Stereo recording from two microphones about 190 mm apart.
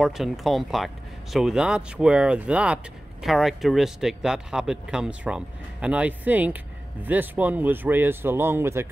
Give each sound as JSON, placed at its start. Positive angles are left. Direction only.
{"t": 0.0, "sound": "speech", "side_deg": 0}